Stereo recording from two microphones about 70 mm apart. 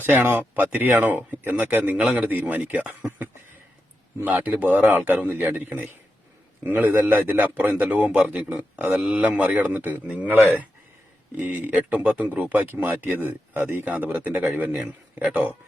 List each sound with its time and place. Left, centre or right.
0.0 s speech: right
4.2 s speech: right
9.0 s speech: centre
9.2 s speech: centre
11.3 s speech: right